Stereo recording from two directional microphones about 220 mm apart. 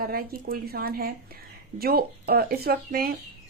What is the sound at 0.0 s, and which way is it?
Speech, 40° right (ahead or behind).